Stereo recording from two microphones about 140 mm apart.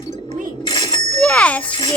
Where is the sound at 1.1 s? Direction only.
10° left (ahead or behind).